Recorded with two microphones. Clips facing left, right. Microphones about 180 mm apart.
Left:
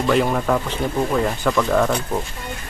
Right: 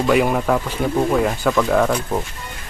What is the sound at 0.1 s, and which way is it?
Speech, 5° right (ahead or behind).